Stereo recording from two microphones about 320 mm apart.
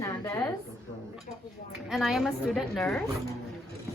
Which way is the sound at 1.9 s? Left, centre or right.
Centre.